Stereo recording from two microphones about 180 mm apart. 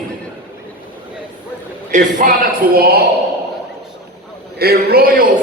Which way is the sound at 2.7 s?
60° right (ahead or behind).